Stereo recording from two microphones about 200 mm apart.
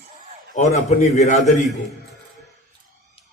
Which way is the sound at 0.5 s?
35° left (ahead or behind).